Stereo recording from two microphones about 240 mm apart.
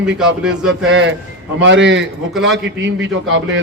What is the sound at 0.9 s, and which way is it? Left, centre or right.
A man's voice, right.